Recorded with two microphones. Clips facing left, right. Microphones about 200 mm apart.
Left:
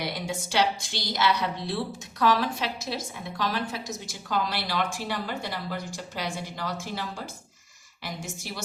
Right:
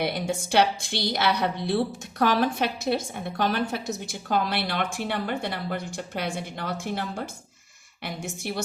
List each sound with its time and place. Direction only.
0.0 s a woman's voice: 60° right (ahead or behind)